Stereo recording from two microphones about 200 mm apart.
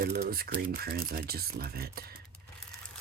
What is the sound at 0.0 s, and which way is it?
Speech, 50° right (ahead or behind).